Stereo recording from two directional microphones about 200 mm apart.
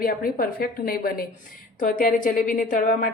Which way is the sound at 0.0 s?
45° left (ahead or behind).